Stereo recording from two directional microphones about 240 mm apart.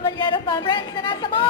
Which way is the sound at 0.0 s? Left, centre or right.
Left.